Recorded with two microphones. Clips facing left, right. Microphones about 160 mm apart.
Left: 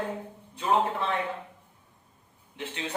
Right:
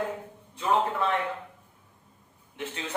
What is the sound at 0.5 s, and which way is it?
Speech, 25° left (ahead or behind).